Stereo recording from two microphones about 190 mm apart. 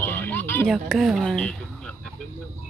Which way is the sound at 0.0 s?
10° left (ahead or behind).